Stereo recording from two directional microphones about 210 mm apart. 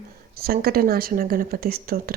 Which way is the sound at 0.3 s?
45° right (ahead or behind).